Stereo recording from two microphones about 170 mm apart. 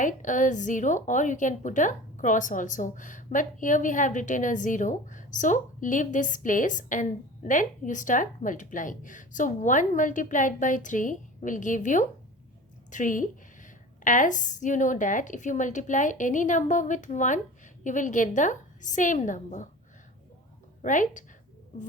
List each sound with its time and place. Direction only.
0.0 s a woman's voice: 50° left (ahead or behind)
20.8 s a woman's voice: 50° left (ahead or behind)